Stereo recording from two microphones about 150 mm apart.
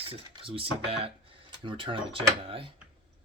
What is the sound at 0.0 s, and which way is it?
Speech, 35° right (ahead or behind).